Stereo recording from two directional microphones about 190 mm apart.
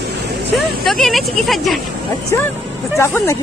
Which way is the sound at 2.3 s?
15° left (ahead or behind).